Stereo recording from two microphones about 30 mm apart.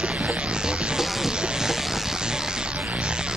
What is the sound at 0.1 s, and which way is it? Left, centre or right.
Music, right.